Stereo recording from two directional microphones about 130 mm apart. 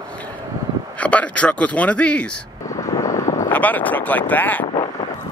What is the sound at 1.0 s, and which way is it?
Speech, 10° left (ahead or behind).